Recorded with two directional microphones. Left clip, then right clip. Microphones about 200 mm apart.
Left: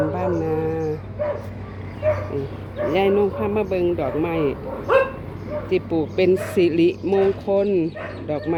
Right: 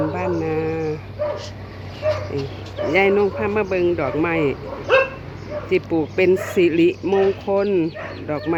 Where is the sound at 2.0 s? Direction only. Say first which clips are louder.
Even; 40° right (ahead or behind).